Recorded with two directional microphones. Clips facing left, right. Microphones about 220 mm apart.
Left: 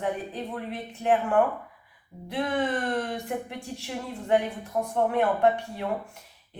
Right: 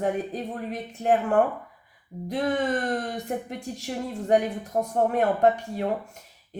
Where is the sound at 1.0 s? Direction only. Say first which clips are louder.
Right 1 dB; 40° right (ahead or behind).